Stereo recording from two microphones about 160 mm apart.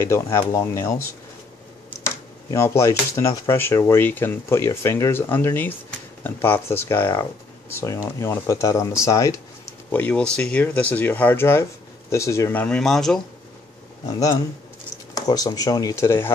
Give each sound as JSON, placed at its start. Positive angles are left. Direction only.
{"t": 0.0, "sound": "speech", "side_deg": 15}
{"t": 14.0, "sound": "speech", "side_deg": 25}